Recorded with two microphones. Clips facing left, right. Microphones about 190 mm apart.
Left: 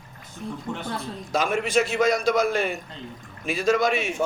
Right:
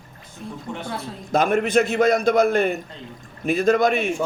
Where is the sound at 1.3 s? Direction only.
55° right (ahead or behind).